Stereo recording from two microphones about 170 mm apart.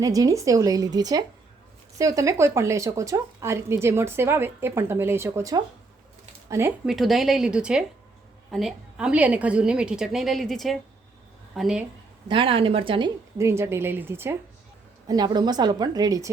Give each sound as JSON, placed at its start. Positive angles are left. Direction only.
{"t": 0.0, "sound": "a woman's voice", "side_deg": -20}
{"t": 6.8, "sound": "a woman's voice", "side_deg": 0}
{"t": 12.3, "sound": "speech", "side_deg": -30}
{"t": 13.4, "sound": "a woman's voice", "side_deg": -15}